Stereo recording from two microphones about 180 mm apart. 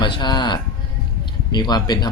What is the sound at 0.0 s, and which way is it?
Speech, 25° left (ahead or behind).